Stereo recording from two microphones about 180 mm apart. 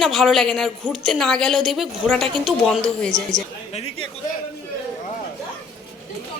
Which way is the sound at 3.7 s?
35° left (ahead or behind).